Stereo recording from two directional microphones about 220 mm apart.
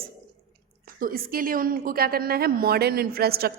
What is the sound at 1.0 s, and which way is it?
A woman's voice, 40° right (ahead or behind).